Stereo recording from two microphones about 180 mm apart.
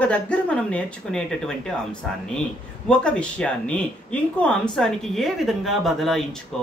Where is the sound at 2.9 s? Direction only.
5° left (ahead or behind).